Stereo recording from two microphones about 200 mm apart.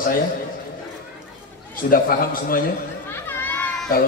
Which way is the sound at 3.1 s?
10° left (ahead or behind).